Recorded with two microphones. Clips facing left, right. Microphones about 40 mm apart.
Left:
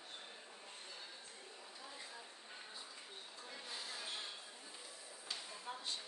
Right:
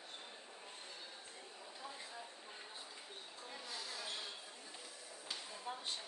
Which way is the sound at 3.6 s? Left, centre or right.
Left.